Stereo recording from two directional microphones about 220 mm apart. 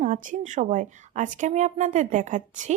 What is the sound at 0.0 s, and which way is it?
A woman's voice, 35° right (ahead or behind).